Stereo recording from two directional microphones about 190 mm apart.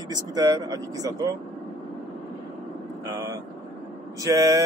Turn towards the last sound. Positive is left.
turn(degrees=-20)  # may be behind; listen again after turning